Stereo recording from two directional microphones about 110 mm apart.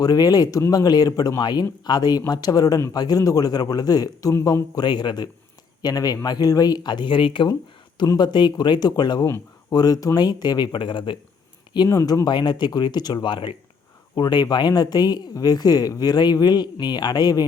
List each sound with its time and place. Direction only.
0.0 s speech: 35° left (ahead or behind)
4.7 s speech: 40° left (ahead or behind)
7.9 s speech: 35° left (ahead or behind)